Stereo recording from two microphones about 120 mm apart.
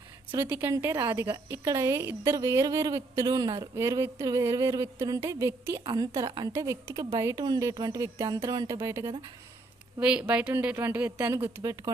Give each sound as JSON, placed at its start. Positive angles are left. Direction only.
{"t": 0.3, "sound": "a woman's voice", "side_deg": -15}
{"t": 5.8, "sound": "a sound", "side_deg": -35}
{"t": 6.5, "sound": "a woman's voice", "side_deg": -25}
{"t": 7.8, "sound": "a sound", "side_deg": -35}
{"t": 8.8, "sound": "a woman's voice", "side_deg": -25}
{"t": 10.0, "sound": "a woman's voice", "side_deg": -10}